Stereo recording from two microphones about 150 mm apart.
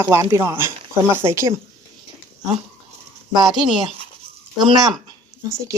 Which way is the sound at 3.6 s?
30° right (ahead or behind).